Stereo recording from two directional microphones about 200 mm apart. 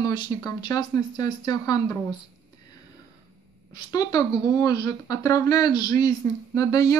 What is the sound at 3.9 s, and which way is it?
Speech, 20° left (ahead or behind).